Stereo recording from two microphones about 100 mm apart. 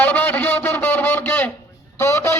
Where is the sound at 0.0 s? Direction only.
15° left (ahead or behind).